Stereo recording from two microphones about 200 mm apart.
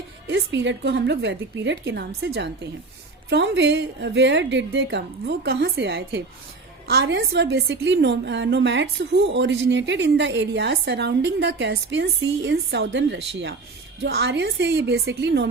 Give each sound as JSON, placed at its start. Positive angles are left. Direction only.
{"t": 0.3, "sound": "a woman's voice", "side_deg": -65}